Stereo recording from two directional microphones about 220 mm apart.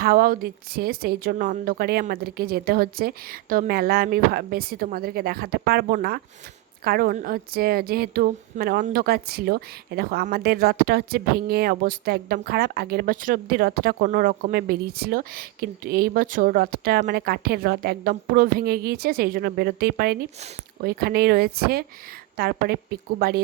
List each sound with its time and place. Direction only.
0.0 s a woman's voice: 40° right (ahead or behind)